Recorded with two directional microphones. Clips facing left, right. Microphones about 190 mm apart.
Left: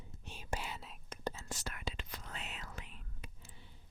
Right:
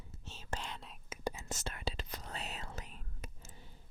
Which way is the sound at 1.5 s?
25° right (ahead or behind).